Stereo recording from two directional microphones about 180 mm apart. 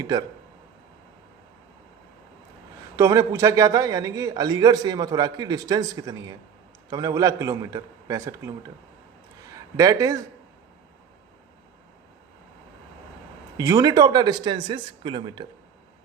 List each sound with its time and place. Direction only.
0.0 s a man's voice: 20° right (ahead or behind)
2.9 s a man's voice: 20° right (ahead or behind)
9.7 s a man's voice: 20° right (ahead or behind)
13.6 s a man's voice: 20° right (ahead or behind)